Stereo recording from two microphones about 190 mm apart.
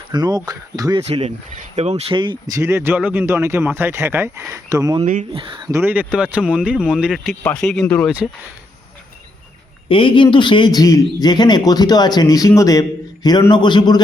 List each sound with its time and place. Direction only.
0.1 s speech: 20° right (ahead or behind)
1.0 s speech: 35° right (ahead or behind); by 7.1 s 5° right (ahead or behind)
7.1 s speech: 5° left (ahead or behind)
9.9 s a man's voice: 25° left (ahead or behind)